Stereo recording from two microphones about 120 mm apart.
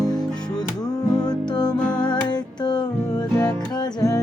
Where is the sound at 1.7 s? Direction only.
10° left (ahead or behind).